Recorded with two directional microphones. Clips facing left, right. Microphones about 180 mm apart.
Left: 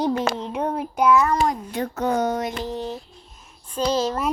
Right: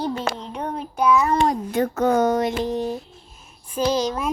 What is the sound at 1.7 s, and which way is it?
Speech, 45° right (ahead or behind).